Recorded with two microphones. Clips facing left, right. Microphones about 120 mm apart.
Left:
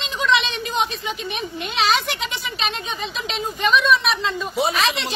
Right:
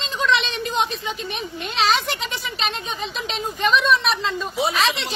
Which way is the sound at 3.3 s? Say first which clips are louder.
Even; 5° left (ahead or behind).